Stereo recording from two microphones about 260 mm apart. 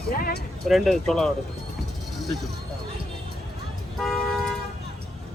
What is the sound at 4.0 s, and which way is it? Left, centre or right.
Vehicle, centre.